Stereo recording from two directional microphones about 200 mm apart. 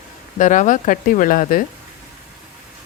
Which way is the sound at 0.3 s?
40° left (ahead or behind).